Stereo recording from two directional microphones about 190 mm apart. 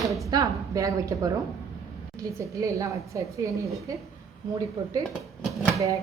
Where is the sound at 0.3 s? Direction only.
20° right (ahead or behind).